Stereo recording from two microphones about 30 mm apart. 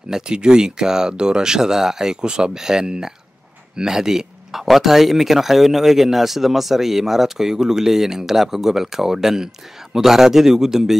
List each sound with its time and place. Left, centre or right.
0.1 s speech: right
4.5 s speech: centre